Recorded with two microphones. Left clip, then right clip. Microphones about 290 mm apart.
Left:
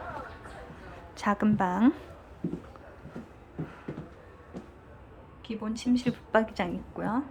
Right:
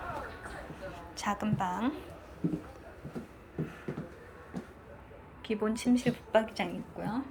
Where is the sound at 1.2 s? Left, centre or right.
Centre.